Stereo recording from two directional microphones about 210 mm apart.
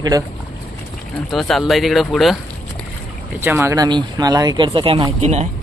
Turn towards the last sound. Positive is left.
turn(degrees=-30)  # may be behind; listen again after turning